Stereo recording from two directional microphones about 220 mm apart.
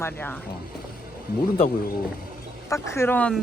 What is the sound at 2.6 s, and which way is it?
Speech, 15° left (ahead or behind).